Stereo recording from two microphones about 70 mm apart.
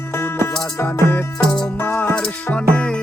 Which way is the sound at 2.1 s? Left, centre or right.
Centre.